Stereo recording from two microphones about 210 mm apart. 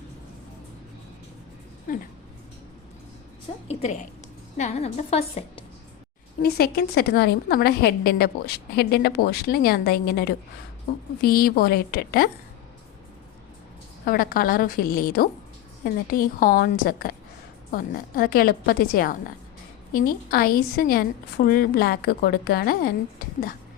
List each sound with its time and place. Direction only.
3.7 s a woman's voice: 30° left (ahead or behind)
6.4 s a woman's voice: 50° left (ahead or behind)
14.0 s a woman's voice: 45° left (ahead or behind)